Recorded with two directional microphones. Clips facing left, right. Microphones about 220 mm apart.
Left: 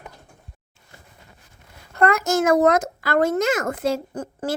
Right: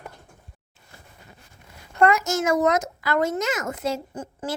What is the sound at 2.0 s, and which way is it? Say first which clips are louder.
A child's voice: left 1 dB; 55° left (ahead or behind).